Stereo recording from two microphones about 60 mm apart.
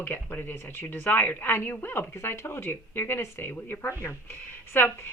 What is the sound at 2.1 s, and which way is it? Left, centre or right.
Speech, left.